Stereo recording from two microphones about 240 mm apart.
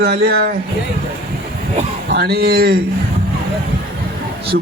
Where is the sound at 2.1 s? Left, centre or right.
Right.